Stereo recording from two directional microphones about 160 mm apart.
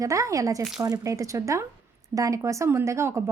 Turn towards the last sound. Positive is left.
turn(degrees=-15)  # may be behind; listen again after turning